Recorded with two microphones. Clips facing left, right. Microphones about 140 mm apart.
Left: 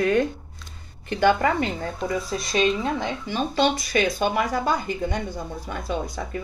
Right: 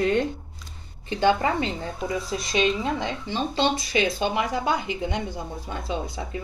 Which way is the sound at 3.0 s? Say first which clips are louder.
Left 1 dB; 25° right (ahead or behind).